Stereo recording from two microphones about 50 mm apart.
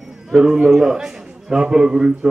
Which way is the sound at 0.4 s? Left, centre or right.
Centre.